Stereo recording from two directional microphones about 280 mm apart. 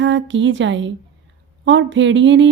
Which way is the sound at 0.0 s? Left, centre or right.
Right.